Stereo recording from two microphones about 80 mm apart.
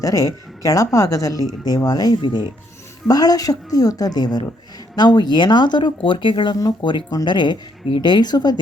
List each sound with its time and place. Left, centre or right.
0.0 s speech: left
7.3 s speech: left